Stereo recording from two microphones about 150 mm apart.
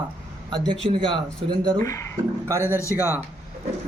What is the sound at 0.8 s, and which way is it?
Speech, 35° right (ahead or behind).